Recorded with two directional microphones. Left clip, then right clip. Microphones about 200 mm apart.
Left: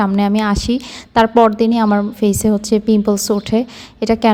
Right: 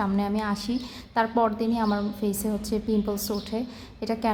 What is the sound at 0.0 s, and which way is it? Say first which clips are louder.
A woman's voice: left 11 dB; 40° left (ahead or behind).